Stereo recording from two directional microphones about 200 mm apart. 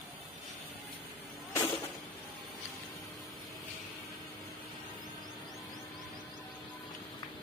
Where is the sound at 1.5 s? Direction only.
15° left (ahead or behind).